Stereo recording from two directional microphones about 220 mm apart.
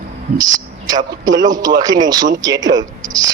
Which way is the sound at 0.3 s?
15° right (ahead or behind).